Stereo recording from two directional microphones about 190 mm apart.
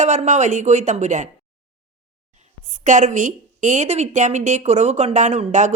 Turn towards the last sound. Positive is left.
turn(degrees=-40)  # may be behind; listen again after turning